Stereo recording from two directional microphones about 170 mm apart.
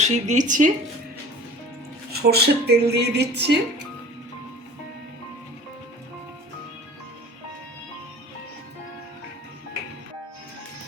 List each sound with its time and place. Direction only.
0.0 s speech: 45° right (ahead or behind)
2.1 s a woman's voice: 70° right (ahead or behind)